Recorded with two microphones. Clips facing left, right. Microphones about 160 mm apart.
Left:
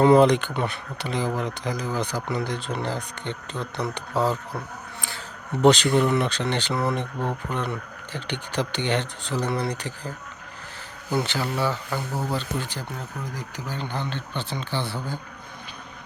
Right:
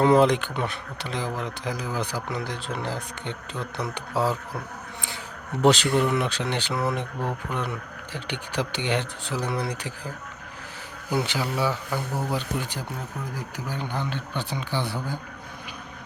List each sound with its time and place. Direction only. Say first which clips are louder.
0.0 s speech: left 2 dB; centre (ahead or behind)
4.9 s speech: even; 20° right (ahead or behind)
5.6 s speech: left 2 dB; 5° right (ahead or behind)
11.1 s speech: left 1 dB; 10° right (ahead or behind)